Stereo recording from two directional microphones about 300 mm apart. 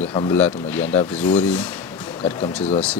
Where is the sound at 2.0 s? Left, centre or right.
Centre.